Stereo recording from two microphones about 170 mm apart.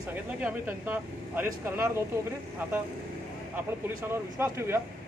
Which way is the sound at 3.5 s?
15° right (ahead or behind).